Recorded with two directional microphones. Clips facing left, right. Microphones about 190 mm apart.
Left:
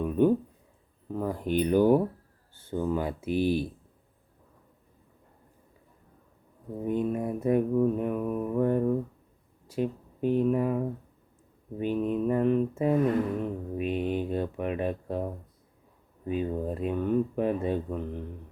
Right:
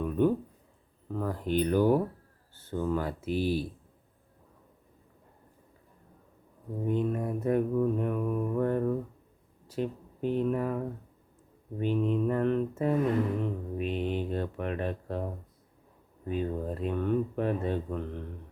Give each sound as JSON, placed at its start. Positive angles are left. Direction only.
{"t": 0.0, "sound": "a sound", "side_deg": 15}
{"t": 1.1, "sound": "mantra", "side_deg": 15}
{"t": 6.8, "sound": "mantra", "side_deg": 10}
{"t": 9.6, "sound": "speech", "side_deg": 10}
{"t": 11.8, "sound": "mantra", "side_deg": 10}
{"t": 16.3, "sound": "mantra", "side_deg": 15}